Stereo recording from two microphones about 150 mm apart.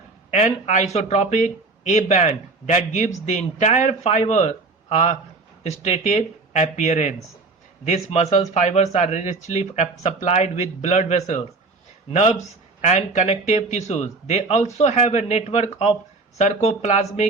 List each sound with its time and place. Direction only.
0.3 s speech: 50° left (ahead or behind)